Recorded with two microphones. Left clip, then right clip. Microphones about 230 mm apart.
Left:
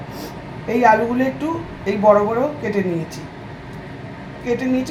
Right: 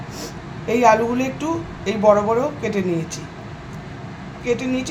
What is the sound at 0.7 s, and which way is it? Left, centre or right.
A woman's voice, centre.